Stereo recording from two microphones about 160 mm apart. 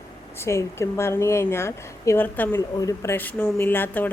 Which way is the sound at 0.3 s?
15° left (ahead or behind).